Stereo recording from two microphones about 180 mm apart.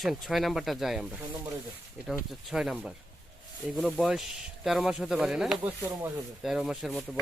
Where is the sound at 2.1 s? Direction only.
Centre (ahead or behind).